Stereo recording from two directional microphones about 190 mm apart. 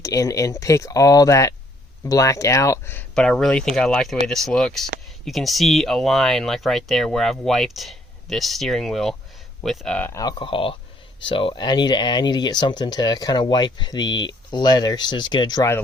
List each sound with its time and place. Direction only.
0.0 s speech: 15° left (ahead or behind)